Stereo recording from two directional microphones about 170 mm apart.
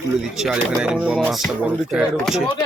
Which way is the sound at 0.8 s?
5° right (ahead or behind).